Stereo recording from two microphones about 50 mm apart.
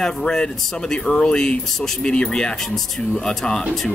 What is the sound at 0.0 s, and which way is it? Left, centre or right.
Speech, centre.